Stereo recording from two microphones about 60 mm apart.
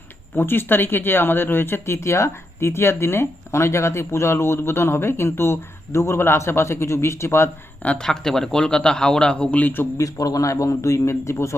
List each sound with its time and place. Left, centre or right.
0.3 s speech: left
7.8 s speech: left
8.0 s a man's voice: centre; by 9.8 s left
10.0 s a man's voice: left